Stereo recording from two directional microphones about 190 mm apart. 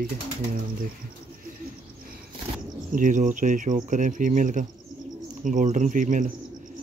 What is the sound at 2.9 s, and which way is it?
Speech, 40° right (ahead or behind).